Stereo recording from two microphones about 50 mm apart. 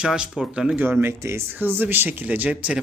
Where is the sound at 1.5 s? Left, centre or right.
Right.